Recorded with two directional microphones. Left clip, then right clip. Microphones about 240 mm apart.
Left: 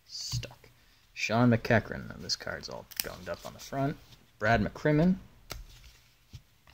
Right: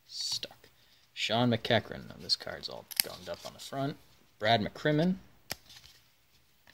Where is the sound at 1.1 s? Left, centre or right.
Centre.